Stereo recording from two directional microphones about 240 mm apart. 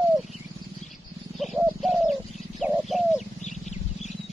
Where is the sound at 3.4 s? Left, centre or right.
Left.